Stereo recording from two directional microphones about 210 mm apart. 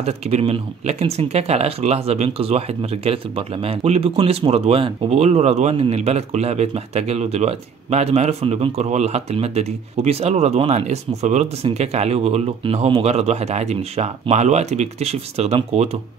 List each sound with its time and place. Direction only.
0.0 s speech: 30° right (ahead or behind)